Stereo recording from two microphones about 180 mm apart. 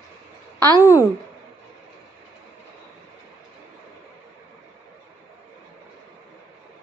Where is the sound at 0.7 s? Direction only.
15° left (ahead or behind).